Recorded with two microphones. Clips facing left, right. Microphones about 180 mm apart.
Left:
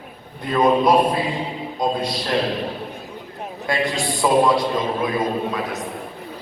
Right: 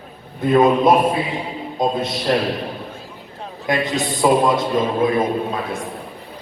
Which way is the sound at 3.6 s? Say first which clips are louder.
Right 2 dB; 20° right (ahead or behind).